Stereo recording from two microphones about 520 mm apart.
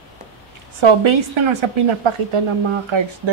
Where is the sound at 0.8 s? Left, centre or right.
Right.